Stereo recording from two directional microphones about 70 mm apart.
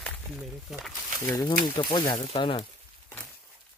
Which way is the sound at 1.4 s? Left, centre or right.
Left.